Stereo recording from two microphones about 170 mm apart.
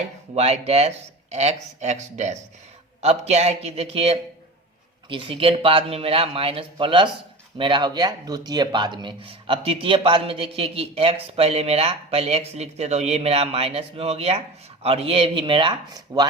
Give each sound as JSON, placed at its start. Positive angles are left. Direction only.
{"t": 0.3, "sound": "speech", "side_deg": -35}